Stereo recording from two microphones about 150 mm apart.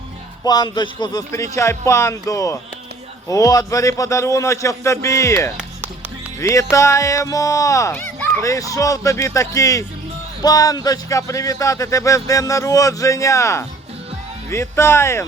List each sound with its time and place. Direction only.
0.4 s speech: 25° left (ahead or behind)